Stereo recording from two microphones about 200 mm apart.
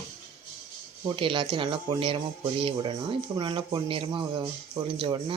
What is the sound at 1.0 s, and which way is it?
Speech, 25° right (ahead or behind).